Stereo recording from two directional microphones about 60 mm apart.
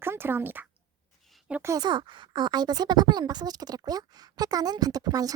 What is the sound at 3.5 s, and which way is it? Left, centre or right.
Speech, right.